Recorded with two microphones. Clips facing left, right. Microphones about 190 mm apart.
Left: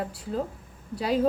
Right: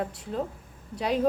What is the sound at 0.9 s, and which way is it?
Speech, centre (ahead or behind).